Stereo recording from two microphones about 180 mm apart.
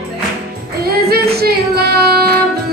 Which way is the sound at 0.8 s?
60° right (ahead or behind).